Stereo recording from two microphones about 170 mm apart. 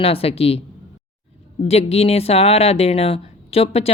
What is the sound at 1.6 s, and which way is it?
Speech, 35° left (ahead or behind).